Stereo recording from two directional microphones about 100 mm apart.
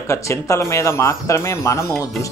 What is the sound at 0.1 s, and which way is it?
Speech, 30° left (ahead or behind).